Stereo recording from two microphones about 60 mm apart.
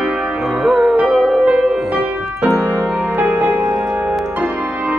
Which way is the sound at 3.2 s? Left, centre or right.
Right.